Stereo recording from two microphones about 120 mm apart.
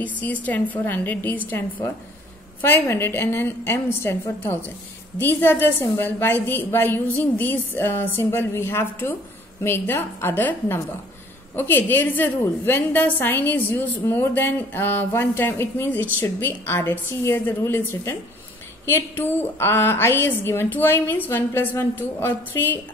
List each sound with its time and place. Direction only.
0.0 s a woman's voice: 15° left (ahead or behind)
2.6 s a woman's voice: 20° left (ahead or behind)